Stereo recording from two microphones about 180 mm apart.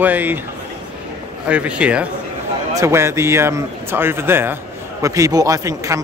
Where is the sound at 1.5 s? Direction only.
5° right (ahead or behind).